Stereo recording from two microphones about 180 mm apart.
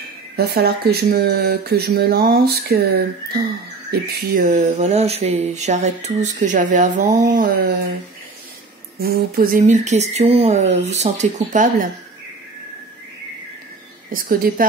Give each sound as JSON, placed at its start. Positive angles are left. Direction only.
{"t": 0.4, "sound": "speech", "side_deg": -60}
{"t": 4.3, "sound": "speech", "side_deg": -50}
{"t": 9.0, "sound": "speech", "side_deg": -55}
{"t": 9.7, "sound": "speech", "side_deg": -40}
{"t": 14.1, "sound": "a woman's voice", "side_deg": -50}